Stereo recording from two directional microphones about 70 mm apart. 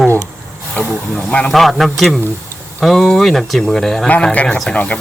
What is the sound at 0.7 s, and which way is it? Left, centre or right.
Speech, centre.